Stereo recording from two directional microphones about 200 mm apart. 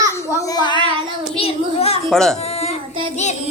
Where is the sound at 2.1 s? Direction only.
5° left (ahead or behind).